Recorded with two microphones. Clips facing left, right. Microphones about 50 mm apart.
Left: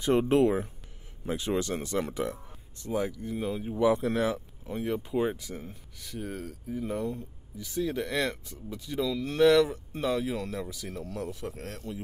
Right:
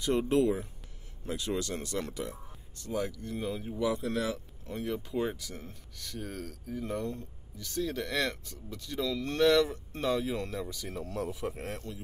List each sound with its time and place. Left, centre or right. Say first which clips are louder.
0.0 s speech: left 4 dB; left
1.2 s speech: left 4 dB; left; by 3.7 s centre
3.7 s speech: left 6 dB; left
4.6 s speech: left 3 dB; centre
10.9 s speech: even; centre